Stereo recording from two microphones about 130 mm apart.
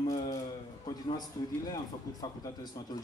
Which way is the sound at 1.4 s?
30° left (ahead or behind).